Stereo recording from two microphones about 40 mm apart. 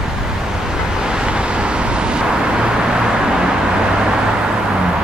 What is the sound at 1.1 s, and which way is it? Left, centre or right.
Vehicle, right.